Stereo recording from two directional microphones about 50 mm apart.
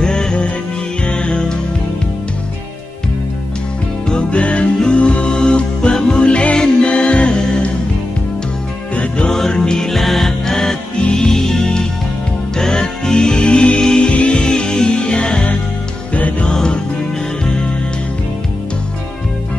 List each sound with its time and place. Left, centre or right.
0.0 s music: centre
4.1 s music: left
8.9 s music: left
9.3 s music: centre; by 16.4 s left
16.4 s music: centre